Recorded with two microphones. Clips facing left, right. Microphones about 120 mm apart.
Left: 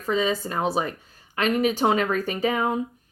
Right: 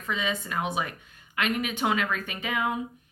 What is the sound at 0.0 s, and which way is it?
Speech, 35° left (ahead or behind).